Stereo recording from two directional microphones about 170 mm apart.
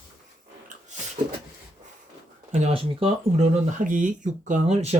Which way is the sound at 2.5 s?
40° right (ahead or behind).